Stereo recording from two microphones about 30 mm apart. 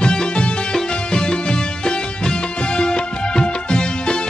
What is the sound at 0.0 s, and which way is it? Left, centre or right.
Music, left.